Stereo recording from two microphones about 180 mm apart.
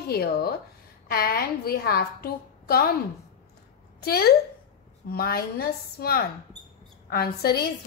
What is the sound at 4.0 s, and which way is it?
A woman's voice, 60° left (ahead or behind).